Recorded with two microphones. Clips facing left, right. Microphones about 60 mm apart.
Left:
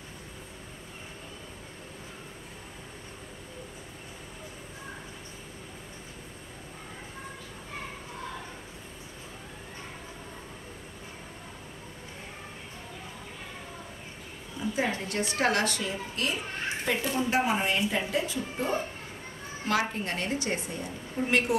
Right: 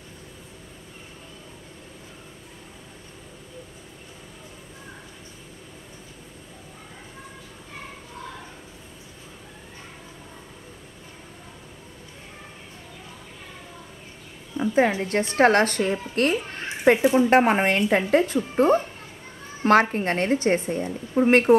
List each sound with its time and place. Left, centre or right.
14.5 s a sound: right
15.0 s a woman's voice: right
17.0 s speech: right
17.3 s a woman's voice: right